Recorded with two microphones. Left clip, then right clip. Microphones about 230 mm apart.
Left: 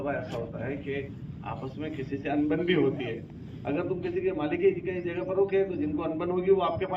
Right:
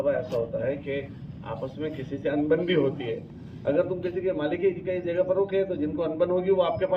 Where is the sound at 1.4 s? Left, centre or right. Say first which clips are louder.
Right 4 dB; left.